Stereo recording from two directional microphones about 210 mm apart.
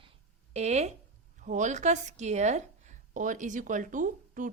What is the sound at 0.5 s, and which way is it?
A woman's voice, 30° right (ahead or behind).